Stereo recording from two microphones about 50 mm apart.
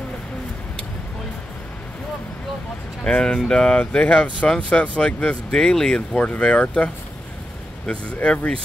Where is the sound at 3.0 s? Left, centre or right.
Centre.